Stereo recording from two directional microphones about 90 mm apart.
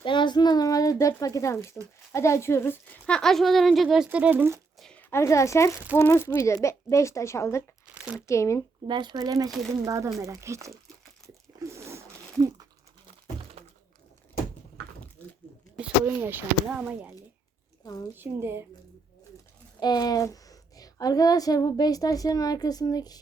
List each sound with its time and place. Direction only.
0.0 s a child's voice: 65° left (ahead or behind); by 2.7 s 30° left (ahead or behind)
3.1 s speech: 5° left (ahead or behind)
4.1 s speech: 15° right (ahead or behind)
5.1 s a child's voice: 30° left (ahead or behind)
7.9 s speech: 15° right (ahead or behind)
8.3 s a child's voice: 35° left (ahead or behind)
8.9 s speech: 60° right (ahead or behind); by 10.7 s 35° right (ahead or behind)
11.6 s a sound: 35° right (ahead or behind)
13.6 s thunk: 90° right
16.0 s speech: 20° right (ahead or behind)
19.8 s a woman's voice: 50° left (ahead or behind)